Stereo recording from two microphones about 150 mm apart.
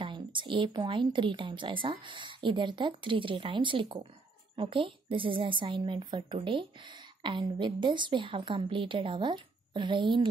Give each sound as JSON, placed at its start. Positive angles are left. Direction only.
{"t": 0.0, "sound": "a woman's voice", "side_deg": -35}